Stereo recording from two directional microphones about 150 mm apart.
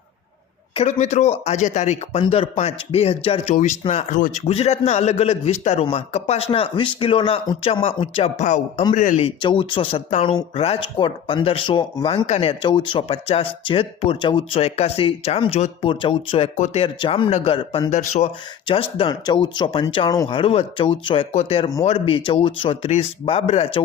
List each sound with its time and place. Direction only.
0.7 s a man's voice: 45° left (ahead or behind)
8.9 s a man's voice: 60° left (ahead or behind)
9.4 s speech: 35° left (ahead or behind)
12.2 s a man's voice: 45° left (ahead or behind)
12.6 s speech: 30° left (ahead or behind)
16.6 s a man's voice: 55° left (ahead or behind)
16.8 s speech: 35° left (ahead or behind)
17.9 s a man's voice: 50° left (ahead or behind)
18.7 s speech: 35° left (ahead or behind)